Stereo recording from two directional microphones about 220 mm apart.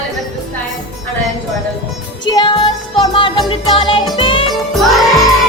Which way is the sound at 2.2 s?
20° left (ahead or behind).